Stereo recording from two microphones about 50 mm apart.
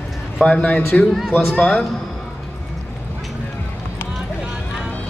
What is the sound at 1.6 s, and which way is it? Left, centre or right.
Speech, left.